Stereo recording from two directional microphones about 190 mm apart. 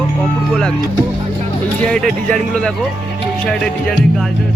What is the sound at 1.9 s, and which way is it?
Speech, 5° left (ahead or behind).